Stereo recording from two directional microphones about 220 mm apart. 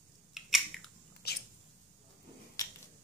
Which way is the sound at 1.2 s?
45° left (ahead or behind).